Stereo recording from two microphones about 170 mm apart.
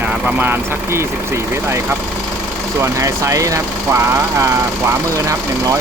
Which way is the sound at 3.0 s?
20° right (ahead or behind).